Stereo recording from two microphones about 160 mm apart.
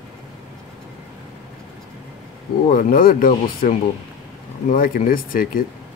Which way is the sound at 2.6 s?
60° left (ahead or behind).